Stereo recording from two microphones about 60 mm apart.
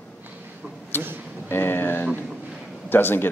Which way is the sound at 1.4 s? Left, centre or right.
Left.